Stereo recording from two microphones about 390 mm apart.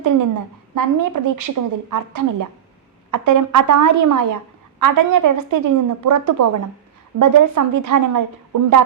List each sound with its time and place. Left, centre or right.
0.0 s a woman's voice: right